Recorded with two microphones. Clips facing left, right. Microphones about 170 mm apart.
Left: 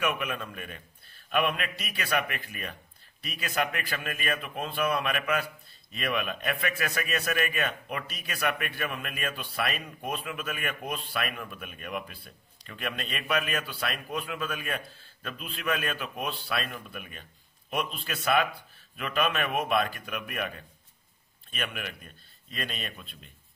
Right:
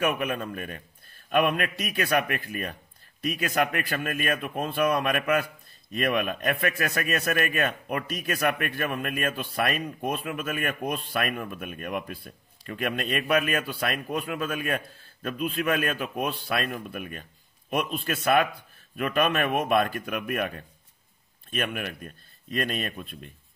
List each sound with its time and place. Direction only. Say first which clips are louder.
0.0 s a man's voice: right 4 dB; 45° right (ahead or behind)